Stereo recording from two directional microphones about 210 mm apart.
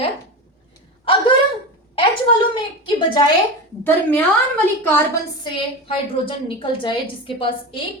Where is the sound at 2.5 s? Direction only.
20° left (ahead or behind).